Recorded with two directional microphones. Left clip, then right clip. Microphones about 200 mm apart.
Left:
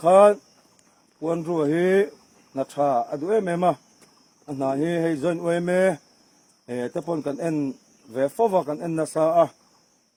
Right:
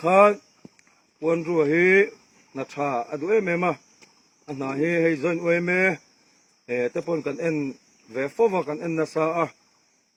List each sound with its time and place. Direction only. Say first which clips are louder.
0.0 s speech: left 2 dB; 60° left (ahead or behind)